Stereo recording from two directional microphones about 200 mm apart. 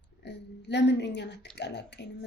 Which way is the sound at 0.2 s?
55° left (ahead or behind).